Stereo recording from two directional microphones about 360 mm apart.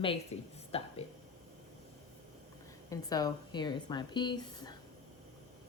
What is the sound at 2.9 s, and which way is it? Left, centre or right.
A woman's voice, centre.